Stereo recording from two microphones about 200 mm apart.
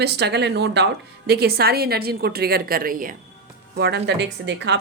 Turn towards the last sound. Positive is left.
turn(degrees=-60)  # may be behind; listen again after turning